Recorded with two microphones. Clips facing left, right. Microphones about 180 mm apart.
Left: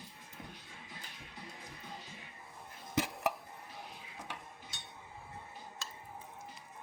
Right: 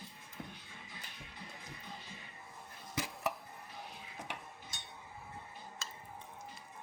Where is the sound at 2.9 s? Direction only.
60° left (ahead or behind).